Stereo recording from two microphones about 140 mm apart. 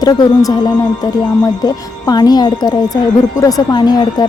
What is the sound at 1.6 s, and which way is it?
A woman's voice, 30° left (ahead or behind).